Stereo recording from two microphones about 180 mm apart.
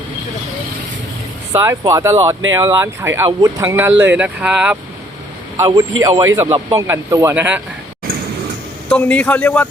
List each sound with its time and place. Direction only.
1.5 s speech: 15° right (ahead or behind)
5.5 s a man's voice: 20° right (ahead or behind)
8.9 s speech: 5° left (ahead or behind)